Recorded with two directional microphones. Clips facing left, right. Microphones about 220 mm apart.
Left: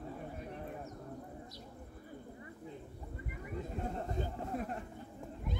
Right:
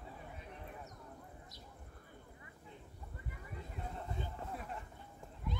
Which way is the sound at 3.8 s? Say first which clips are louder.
Left 5 dB; 45° left (ahead or behind).